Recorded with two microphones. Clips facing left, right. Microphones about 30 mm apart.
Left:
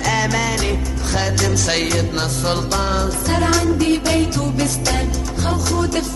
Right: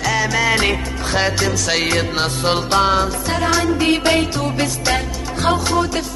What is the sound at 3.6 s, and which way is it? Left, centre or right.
Music, right.